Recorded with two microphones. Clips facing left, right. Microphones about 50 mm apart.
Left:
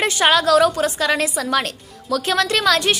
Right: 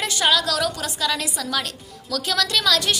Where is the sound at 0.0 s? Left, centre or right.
Left.